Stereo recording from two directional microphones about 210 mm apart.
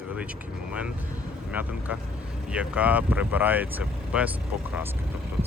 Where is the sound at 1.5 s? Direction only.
5° right (ahead or behind).